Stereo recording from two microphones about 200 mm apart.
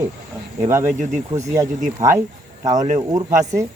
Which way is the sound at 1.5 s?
15° right (ahead or behind).